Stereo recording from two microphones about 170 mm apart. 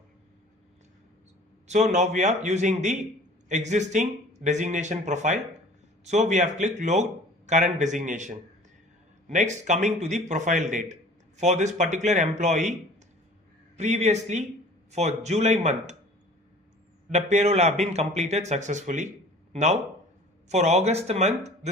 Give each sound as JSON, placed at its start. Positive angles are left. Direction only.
{"t": 1.6, "sound": "speech", "side_deg": -45}
{"t": 13.7, "sound": "a man's voice", "side_deg": -40}
{"t": 17.1, "sound": "a man's voice", "side_deg": -45}
{"t": 20.5, "sound": "a man's voice", "side_deg": -40}